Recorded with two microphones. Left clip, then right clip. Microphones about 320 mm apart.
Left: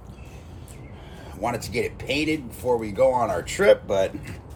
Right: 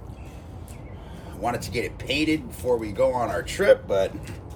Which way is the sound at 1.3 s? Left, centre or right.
Left.